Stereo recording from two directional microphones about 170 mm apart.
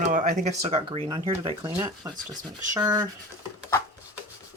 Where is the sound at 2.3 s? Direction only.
25° right (ahead or behind).